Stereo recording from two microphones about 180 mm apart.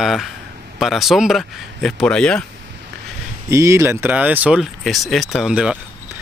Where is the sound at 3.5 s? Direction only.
15° right (ahead or behind).